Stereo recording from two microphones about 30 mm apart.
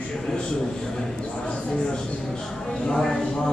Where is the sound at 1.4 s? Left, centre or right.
Left.